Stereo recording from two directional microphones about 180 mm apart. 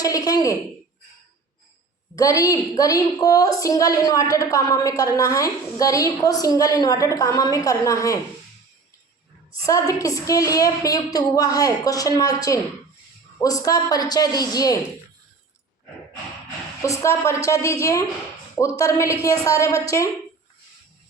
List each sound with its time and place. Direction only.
0.0 s speech: 20° left (ahead or behind)
2.1 s a woman's voice: 20° left (ahead or behind)
9.6 s a woman's voice: 20° left (ahead or behind)
16.8 s a woman's voice: 15° left (ahead or behind)